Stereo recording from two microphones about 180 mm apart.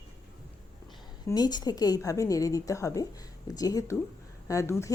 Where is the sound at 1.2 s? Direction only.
20° left (ahead or behind).